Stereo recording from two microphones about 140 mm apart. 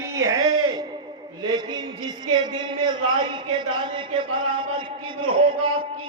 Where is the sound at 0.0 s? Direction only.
25° right (ahead or behind).